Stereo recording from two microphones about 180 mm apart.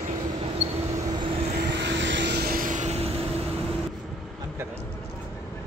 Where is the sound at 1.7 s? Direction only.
80° right; by 3.1 s 40° right (ahead or behind).